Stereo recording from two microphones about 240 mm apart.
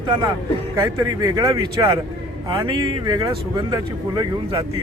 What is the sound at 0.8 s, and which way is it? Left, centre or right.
Speech, centre.